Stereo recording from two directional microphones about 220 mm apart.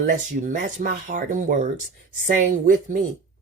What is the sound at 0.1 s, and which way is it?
Speech, 35° right (ahead or behind).